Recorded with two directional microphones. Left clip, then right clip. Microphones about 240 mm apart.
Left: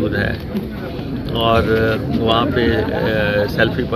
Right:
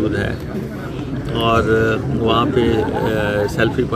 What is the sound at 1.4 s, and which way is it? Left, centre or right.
Speech, centre.